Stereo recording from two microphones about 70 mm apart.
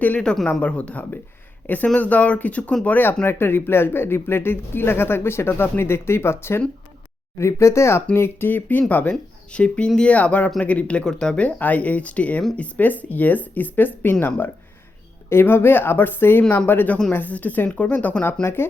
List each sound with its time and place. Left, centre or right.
0.3 s speech: centre
17.7 s speech: centre
17.9 s speech: left